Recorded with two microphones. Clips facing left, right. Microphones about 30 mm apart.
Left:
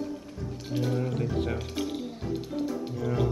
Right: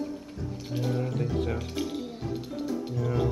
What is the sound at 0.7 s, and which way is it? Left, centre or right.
Speech, centre.